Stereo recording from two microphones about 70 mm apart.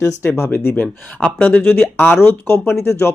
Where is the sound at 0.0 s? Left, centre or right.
Left.